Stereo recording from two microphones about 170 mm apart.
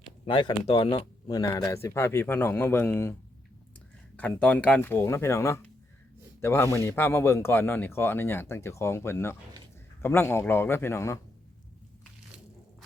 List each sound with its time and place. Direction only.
0.3 s speech: 25° left (ahead or behind)
4.2 s speech: 10° left (ahead or behind)